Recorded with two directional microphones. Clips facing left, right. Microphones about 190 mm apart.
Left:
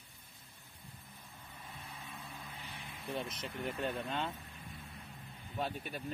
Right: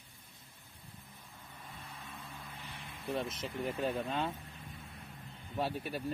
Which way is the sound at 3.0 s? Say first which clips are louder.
Right 4 dB; centre (ahead or behind).